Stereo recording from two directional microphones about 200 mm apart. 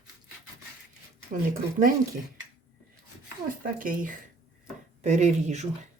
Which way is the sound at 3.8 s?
45° right (ahead or behind).